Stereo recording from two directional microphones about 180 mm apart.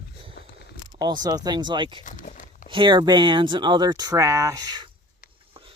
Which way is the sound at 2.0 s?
45° left (ahead or behind).